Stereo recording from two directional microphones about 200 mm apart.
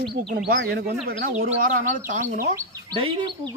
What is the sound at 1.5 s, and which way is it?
Speech, 40° right (ahead or behind).